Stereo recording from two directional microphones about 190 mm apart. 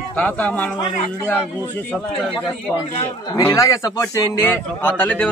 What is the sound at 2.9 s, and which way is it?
A man's voice, 20° left (ahead or behind).